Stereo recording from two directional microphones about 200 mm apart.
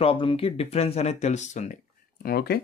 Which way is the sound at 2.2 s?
50° left (ahead or behind).